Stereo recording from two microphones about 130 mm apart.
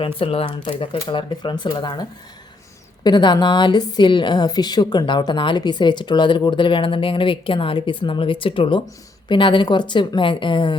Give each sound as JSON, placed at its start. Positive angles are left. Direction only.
{"t": 0.0, "sound": "a woman's voice", "side_deg": 45}